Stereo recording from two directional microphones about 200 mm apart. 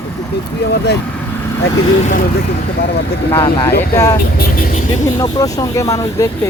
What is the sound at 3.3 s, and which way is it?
Speech, 20° left (ahead or behind).